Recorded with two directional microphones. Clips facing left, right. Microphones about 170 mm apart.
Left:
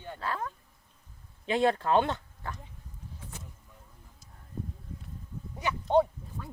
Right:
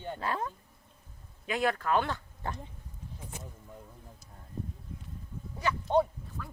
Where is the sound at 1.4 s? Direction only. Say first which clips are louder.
Left 4 dB; 25° left (ahead or behind).